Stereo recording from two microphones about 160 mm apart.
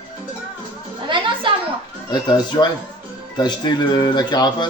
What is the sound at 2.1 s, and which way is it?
Speech, 25° left (ahead or behind).